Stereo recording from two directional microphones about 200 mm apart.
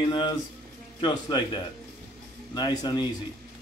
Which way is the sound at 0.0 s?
25° left (ahead or behind).